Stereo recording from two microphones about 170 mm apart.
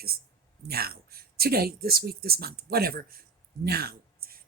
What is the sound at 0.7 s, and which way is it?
Speech, 65° right (ahead or behind).